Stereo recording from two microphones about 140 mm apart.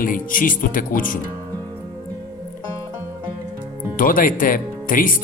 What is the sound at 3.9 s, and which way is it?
Speech, 80° left.